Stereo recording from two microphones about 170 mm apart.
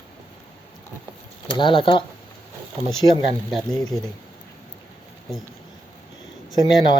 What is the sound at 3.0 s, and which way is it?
Speech, 30° right (ahead or behind).